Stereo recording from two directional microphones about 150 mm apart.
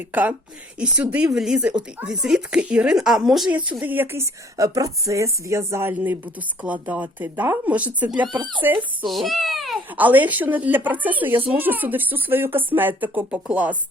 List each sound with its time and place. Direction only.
0.1 s speech: 10° right (ahead or behind)
8.2 s speech: 30° right (ahead or behind)
8.6 s speech: 15° right (ahead or behind)
9.0 s speech: centre (ahead or behind)
9.9 s speech: 10° right (ahead or behind)